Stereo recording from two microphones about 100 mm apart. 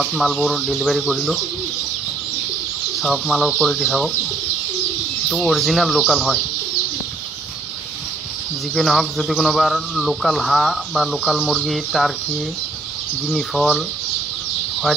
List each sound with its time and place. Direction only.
0.0 s speech: centre (ahead or behind)
3.0 s speech: centre (ahead or behind)
5.3 s speech: centre (ahead or behind)
8.7 s speech: centre (ahead or behind)
13.3 s speech: centre (ahead or behind)